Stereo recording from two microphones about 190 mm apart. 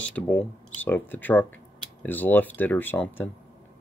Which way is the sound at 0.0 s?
5° left (ahead or behind).